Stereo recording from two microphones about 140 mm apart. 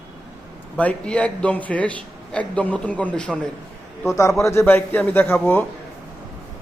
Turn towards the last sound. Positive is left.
turn(degrees=15)  # may be behind; listen again after turning